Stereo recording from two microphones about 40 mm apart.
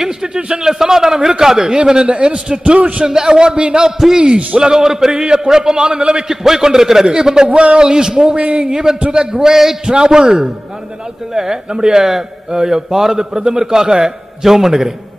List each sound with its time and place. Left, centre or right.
0.0 s a sound: centre
0.4 s a man's voice: right
2.6 s a man's voice: right
3.1 s a man's voice: centre
4.0 s a man's voice: centre
8.4 s a man's voice: right
8.6 s a man's voice: centre